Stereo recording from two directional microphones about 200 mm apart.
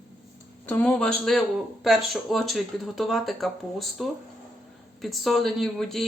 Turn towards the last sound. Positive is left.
turn(degrees=0)  # may be behind; listen again after turning